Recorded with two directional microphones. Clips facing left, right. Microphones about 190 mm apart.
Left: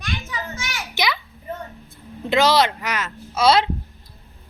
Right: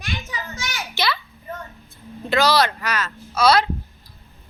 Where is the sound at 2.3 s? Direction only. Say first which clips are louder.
Left 1 dB; 20° left (ahead or behind).